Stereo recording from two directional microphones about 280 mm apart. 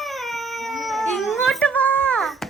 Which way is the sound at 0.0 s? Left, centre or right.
Centre.